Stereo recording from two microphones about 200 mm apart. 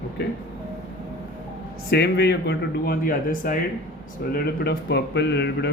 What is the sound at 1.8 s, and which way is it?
Speech, 55° left (ahead or behind).